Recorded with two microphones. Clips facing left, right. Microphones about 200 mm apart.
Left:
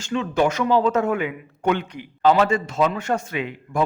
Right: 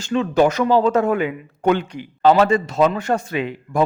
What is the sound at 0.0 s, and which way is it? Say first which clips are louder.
Speech: right 4 dB; 35° right (ahead or behind).